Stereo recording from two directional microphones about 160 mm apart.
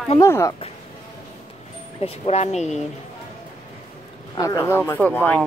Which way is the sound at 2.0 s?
40° left (ahead or behind).